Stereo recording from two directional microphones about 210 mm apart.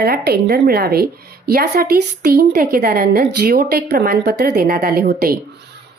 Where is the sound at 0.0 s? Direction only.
50° right (ahead or behind).